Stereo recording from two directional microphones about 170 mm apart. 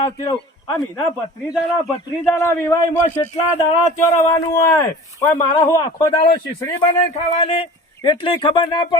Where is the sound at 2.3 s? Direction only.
15° left (ahead or behind).